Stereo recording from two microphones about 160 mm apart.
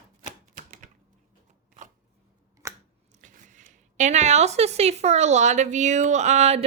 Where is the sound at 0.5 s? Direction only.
55° right (ahead or behind).